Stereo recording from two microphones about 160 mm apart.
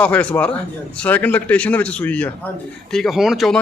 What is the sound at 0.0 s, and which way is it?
Speech, 10° left (ahead or behind).